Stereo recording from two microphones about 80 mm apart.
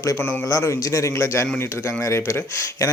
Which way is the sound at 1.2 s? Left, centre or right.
Left.